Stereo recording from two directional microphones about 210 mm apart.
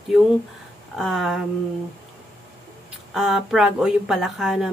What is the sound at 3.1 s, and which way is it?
Speech, centre (ahead or behind).